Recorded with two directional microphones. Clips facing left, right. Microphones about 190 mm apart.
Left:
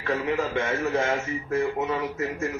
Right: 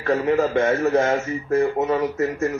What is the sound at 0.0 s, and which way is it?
A man's voice, 40° right (ahead or behind).